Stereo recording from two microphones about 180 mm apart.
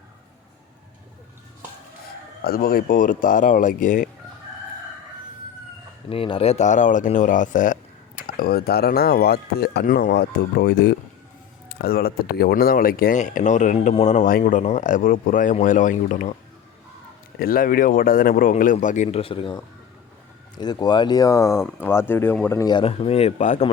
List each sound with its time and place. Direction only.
2.4 s speech: 55° left (ahead or behind)
6.1 s speech: 30° left (ahead or behind); by 16.3 s 45° left (ahead or behind)
17.4 s speech: 50° left (ahead or behind)